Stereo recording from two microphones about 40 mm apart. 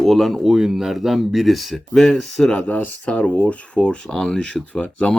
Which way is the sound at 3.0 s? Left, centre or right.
Left.